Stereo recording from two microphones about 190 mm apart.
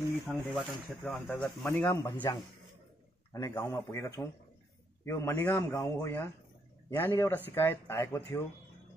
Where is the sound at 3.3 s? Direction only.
15° left (ahead or behind).